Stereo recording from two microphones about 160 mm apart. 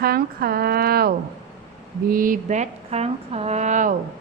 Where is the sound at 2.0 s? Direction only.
60° right (ahead or behind).